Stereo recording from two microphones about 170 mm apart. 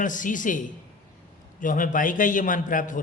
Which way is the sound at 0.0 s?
50° left (ahead or behind).